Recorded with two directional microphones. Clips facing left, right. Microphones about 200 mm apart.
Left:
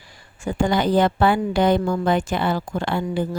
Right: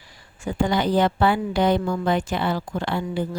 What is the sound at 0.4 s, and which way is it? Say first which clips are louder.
A woman's voice: left 2 dB; 50° left (ahead or behind).